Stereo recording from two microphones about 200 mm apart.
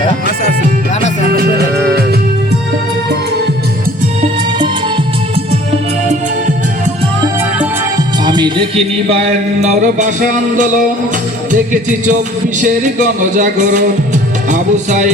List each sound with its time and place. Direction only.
7.9 s music: 20° right (ahead or behind); by 15.1 s 40° right (ahead or behind)